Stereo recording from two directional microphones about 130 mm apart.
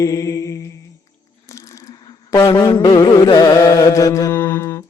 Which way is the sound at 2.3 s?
30° left (ahead or behind).